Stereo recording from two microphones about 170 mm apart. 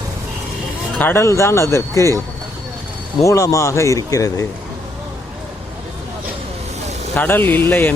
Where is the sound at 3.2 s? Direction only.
20° left (ahead or behind).